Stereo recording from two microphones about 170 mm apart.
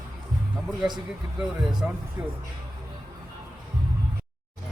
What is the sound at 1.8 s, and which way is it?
Speech, 5° right (ahead or behind).